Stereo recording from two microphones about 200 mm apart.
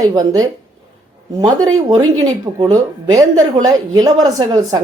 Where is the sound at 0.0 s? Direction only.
15° right (ahead or behind).